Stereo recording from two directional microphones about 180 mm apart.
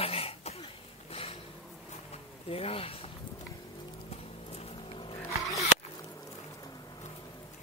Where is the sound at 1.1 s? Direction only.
30° left (ahead or behind).